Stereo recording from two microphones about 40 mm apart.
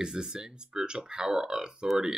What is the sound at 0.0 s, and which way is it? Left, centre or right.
Speech, centre.